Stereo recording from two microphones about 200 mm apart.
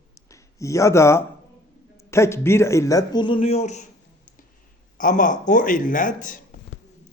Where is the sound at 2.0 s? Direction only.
15° left (ahead or behind).